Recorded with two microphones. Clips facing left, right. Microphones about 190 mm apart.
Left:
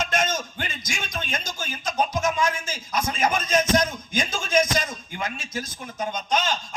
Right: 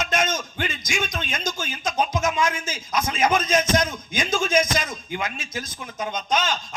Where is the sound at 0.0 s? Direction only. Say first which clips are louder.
Right 1 dB; 45° left (ahead or behind).